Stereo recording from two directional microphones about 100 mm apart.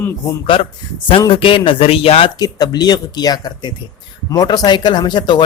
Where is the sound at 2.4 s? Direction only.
40° left (ahead or behind).